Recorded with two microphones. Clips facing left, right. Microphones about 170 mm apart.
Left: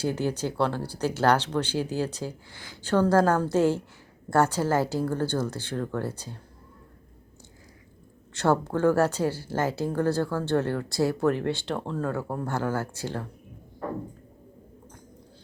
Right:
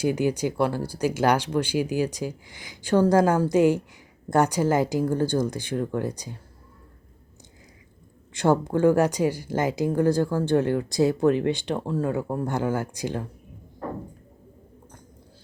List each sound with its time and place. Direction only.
0.0 s speech: 15° right (ahead or behind)
8.3 s speech: 15° right (ahead or behind)